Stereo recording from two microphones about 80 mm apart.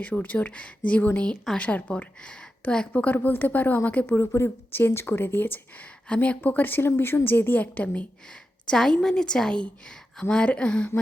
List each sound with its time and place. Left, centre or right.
0.0 s speech: centre
8.6 s a woman's voice: centre